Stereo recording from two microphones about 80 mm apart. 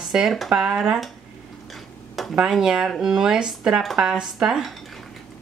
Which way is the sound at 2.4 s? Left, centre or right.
Centre.